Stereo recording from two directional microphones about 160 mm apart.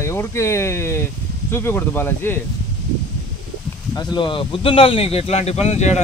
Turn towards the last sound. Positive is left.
turn(degrees=45)  # may be behind; listen again after turning